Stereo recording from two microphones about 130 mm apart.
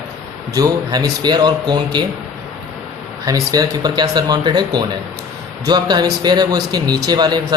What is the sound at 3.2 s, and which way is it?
A man's voice, 30° right (ahead or behind).